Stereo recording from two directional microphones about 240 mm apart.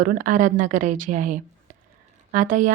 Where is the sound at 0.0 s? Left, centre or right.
Right.